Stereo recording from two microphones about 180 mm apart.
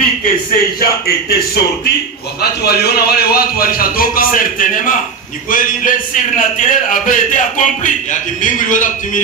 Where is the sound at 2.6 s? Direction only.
60° left (ahead or behind).